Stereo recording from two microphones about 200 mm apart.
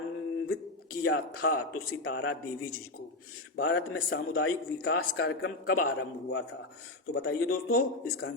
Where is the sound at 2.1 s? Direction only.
70° left (ahead or behind).